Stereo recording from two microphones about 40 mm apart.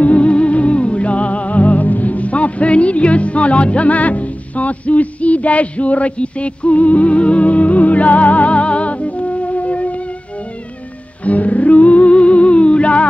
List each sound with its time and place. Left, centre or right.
0.0 s music: left
11.2 s music: left